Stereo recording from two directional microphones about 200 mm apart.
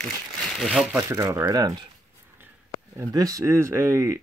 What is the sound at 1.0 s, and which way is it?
Speech, 15° right (ahead or behind).